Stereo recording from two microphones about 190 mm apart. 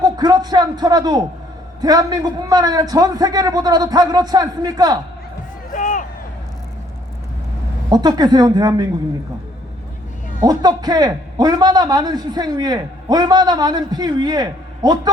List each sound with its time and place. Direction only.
0.0 s a man's voice: 20° right (ahead or behind)
5.7 s a sound: 40° left (ahead or behind)
7.9 s a man's voice: 20° right (ahead or behind)
10.4 s a man's voice: 20° right (ahead or behind)